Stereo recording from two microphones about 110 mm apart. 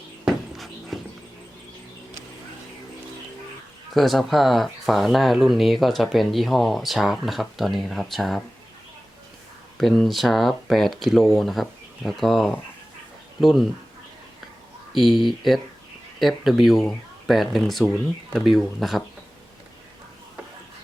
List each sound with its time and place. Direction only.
0.3 s dog: centre (ahead or behind)
3.9 s speech: centre (ahead or behind)
9.7 s speech: centre (ahead or behind)
14.9 s speech: centre (ahead or behind)